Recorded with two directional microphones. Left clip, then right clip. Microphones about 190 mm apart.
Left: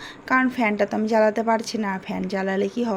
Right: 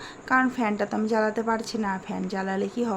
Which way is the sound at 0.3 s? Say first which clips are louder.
Left 3 dB; 15° left (ahead or behind).